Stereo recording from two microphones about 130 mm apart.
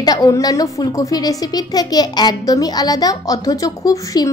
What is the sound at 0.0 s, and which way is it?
A woman's voice, 30° left (ahead or behind).